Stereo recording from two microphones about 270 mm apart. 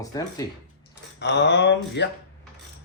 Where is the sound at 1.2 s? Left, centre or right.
Left.